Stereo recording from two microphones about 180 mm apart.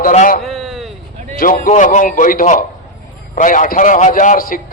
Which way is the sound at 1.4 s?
50° left (ahead or behind).